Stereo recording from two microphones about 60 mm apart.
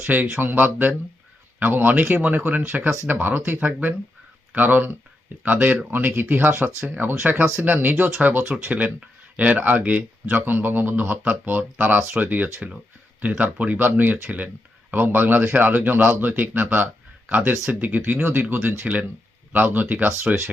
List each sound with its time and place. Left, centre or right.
0.1 s speech: right
20.3 s speech: centre